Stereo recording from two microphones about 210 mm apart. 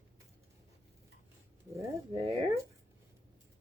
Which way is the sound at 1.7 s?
15° right (ahead or behind).